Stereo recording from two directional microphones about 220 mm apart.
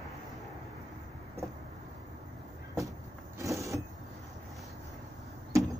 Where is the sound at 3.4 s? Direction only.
15° right (ahead or behind).